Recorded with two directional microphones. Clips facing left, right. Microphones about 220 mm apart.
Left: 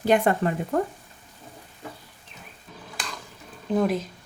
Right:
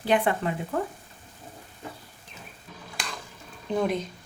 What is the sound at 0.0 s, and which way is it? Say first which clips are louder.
Speech: left 3 dB; 45° left (ahead or behind).